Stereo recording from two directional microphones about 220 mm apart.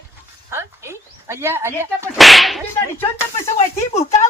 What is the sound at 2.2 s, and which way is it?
Speech, centre (ahead or behind).